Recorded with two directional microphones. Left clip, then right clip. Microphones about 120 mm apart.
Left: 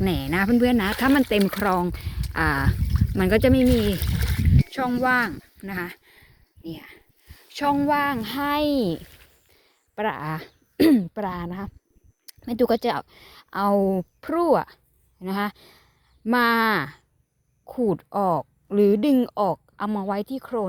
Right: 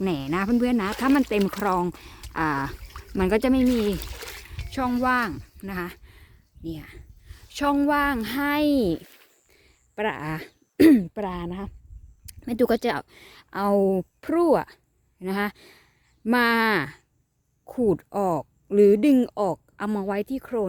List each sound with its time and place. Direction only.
0.0 s speech: centre (ahead or behind)
3.8 s pour: 85° left
4.7 s a sound: 15° right (ahead or behind)
7.5 s a child's voice: 30° right (ahead or behind)
19.9 s speech: 40° right (ahead or behind)